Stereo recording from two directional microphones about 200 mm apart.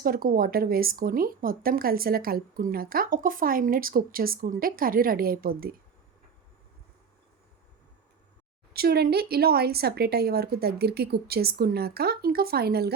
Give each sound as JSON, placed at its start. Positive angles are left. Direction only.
{"t": 0.0, "sound": "speech", "side_deg": -45}
{"t": 8.7, "sound": "speech", "side_deg": -50}